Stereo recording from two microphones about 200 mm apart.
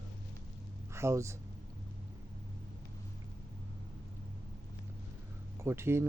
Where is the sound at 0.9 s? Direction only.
15° right (ahead or behind).